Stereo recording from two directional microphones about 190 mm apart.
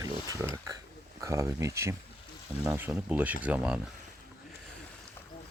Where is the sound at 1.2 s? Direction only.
15° right (ahead or behind).